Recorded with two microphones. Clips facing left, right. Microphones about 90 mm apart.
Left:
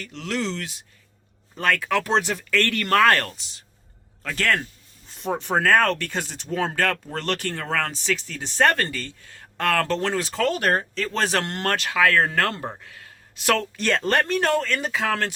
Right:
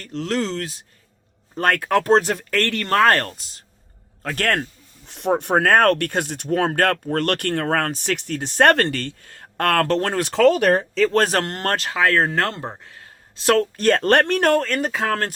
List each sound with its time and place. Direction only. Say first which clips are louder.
0.0 s speech: right 4 dB; 40° right (ahead or behind)
2.6 s speech: right 2 dB; 30° right (ahead or behind); by 4.7 s 45° right (ahead or behind)
5.0 s speech: right 6 dB; 70° right (ahead or behind); by 8.7 s 50° right (ahead or behind)
8.7 s speech: right 7 dB; 70° right (ahead or behind); by 10.3 s 55° right (ahead or behind)
11.2 s speech: right 3 dB; 40° right (ahead or behind)
14.1 s speech: right 3 dB; 65° right (ahead or behind); by 15.3 s 45° right (ahead or behind)